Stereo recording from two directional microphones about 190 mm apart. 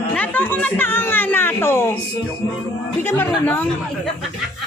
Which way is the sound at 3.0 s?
10° left (ahead or behind).